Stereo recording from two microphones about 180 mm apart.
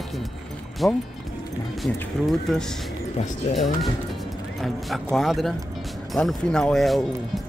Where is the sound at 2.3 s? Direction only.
Centre (ahead or behind).